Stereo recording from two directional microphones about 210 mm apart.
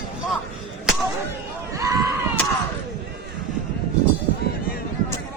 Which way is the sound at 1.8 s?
15° right (ahead or behind).